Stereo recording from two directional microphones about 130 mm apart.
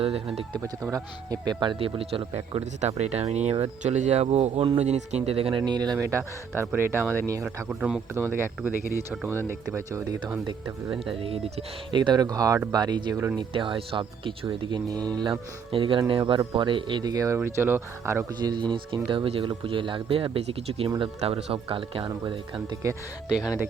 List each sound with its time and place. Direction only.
0.5 s speech: 25° right (ahead or behind)
1.8 s speech: 45° right (ahead or behind); by 7.4 s 25° right (ahead or behind)
7.4 s speech: 10° right (ahead or behind)
8.3 s speech: 15° right (ahead or behind)
11.2 s speech: 45° right (ahead or behind); by 17.3 s 30° right (ahead or behind)
17.3 s speech: 15° right (ahead or behind)
18.3 s speech: 35° right (ahead or behind)
23.3 s speech: 5° right (ahead or behind)